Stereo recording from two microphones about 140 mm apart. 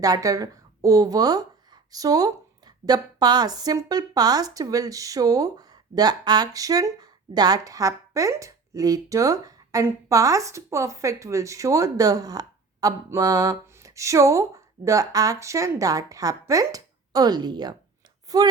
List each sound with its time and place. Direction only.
0.0 s speech: 25° right (ahead or behind)